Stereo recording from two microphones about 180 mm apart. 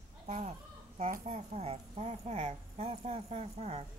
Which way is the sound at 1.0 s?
45° right (ahead or behind).